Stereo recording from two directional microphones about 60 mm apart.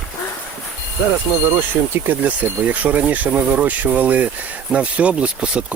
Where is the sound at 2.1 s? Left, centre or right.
Right.